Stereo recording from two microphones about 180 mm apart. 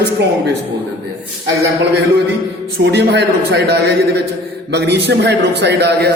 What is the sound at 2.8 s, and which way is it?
A man's voice, 65° right (ahead or behind).